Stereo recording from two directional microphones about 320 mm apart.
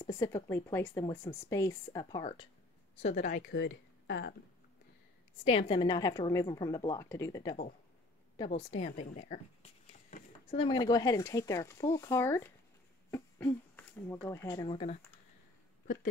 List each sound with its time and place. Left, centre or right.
0.0 s a woman's voice: centre; by 4.4 s left
5.4 s speech: centre
8.5 s speech: left